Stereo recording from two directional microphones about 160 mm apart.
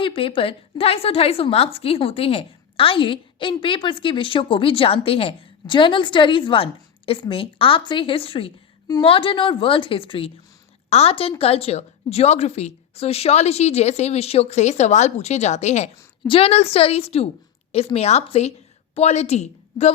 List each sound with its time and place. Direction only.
0.0 s a woman's voice: 35° left (ahead or behind)
16.2 s a woman's voice: 35° left (ahead or behind)